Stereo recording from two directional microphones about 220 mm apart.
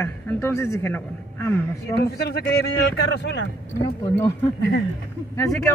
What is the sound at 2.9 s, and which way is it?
Speech, 50° left (ahead or behind).